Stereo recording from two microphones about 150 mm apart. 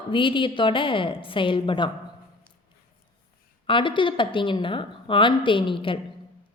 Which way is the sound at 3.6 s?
35° left (ahead or behind).